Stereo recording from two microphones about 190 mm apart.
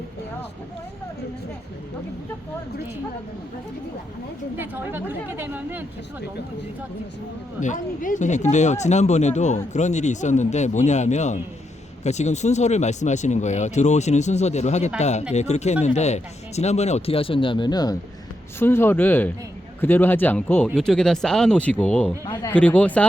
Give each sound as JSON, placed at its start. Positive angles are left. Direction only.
{"t": 4.5, "sound": "a woman's voice", "side_deg": -10}
{"t": 7.6, "sound": "speech", "side_deg": 40}